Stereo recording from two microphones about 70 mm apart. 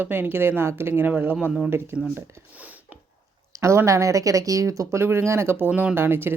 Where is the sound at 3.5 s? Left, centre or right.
Right.